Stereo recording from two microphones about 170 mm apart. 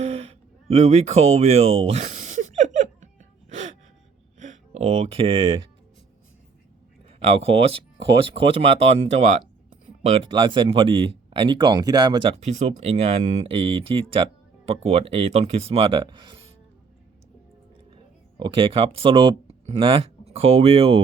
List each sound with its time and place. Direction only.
0.0 s a sound: 40° right (ahead or behind)
4.4 s speech: 45° right (ahead or behind); by 5.6 s 30° right (ahead or behind)
7.1 s speech: 35° right (ahead or behind)
10.0 s speech: 40° right (ahead or behind)
10.2 s speech: 30° right (ahead or behind)
12.4 s speech: 40° right (ahead or behind)
17.9 s speech: 30° right (ahead or behind)